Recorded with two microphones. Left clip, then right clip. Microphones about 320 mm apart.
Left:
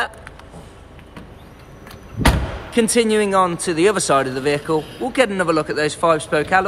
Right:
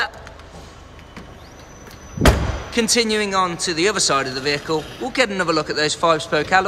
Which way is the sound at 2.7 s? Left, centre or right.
Centre.